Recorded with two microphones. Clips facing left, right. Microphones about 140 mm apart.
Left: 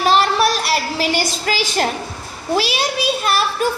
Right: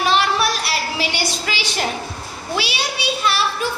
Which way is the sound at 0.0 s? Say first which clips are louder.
Left 3 dB; 40° left (ahead or behind).